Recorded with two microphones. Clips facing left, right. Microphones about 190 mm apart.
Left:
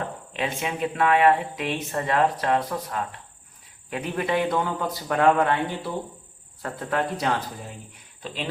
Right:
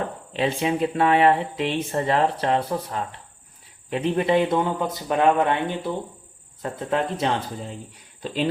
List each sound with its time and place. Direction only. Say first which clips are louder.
0.3 s speech: right 6 dB; 30° right (ahead or behind)